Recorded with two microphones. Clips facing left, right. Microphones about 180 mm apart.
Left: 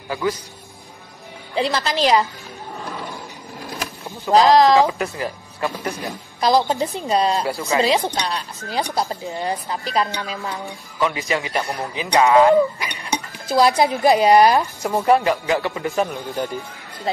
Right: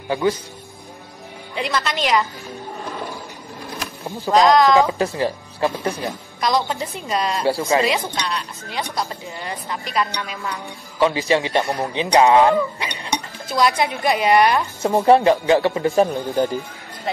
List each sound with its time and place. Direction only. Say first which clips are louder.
0.1 s a man's voice: right 3 dB; 25° right (ahead or behind)
1.5 s speech: left 3 dB; 30° left (ahead or behind)
4.3 s speech: left 1 dB; 30° left (ahead or behind)
4.9 s speech: right 4 dB; 30° right (ahead or behind)
6.4 s speech: left 4 dB; 35° left (ahead or behind)
7.4 s speech: right 5 dB; 30° right (ahead or behind)
7.7 s speech: left 1 dB; 30° left (ahead or behind)
11.0 s a man's voice: right 4 dB; 30° right (ahead or behind)
12.4 s a sound: left 3 dB; 30° right (ahead or behind)
13.5 s speech: left 3 dB; 35° left (ahead or behind)
14.8 s a man's voice: right 3 dB; 25° right (ahead or behind)